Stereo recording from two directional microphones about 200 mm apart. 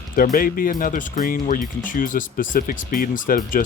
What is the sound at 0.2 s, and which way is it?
Speech, 45° left (ahead or behind).